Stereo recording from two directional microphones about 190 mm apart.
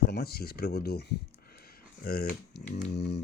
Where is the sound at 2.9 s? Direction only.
60° left (ahead or behind).